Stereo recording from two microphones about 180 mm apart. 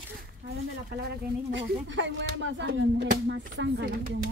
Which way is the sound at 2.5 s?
75° right (ahead or behind).